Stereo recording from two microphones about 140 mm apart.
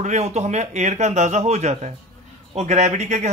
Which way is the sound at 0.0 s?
55° right (ahead or behind).